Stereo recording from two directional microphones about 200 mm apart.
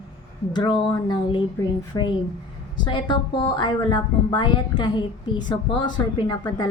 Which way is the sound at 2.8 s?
20° left (ahead or behind).